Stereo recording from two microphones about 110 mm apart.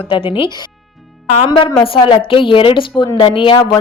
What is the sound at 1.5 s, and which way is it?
Speech, 40° left (ahead or behind).